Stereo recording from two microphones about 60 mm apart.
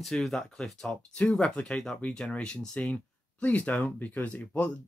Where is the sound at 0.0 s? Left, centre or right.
Centre.